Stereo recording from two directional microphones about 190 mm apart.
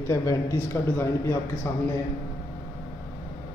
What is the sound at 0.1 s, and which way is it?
A man's voice, 15° left (ahead or behind).